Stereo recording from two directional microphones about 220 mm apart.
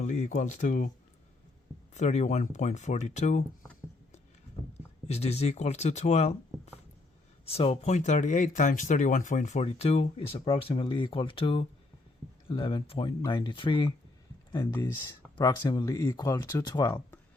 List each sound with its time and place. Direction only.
0.0 s speech: 30° left (ahead or behind)
1.9 s speech: 30° left (ahead or behind)
5.0 s speech: 30° left (ahead or behind)
7.4 s speech: 25° left (ahead or behind)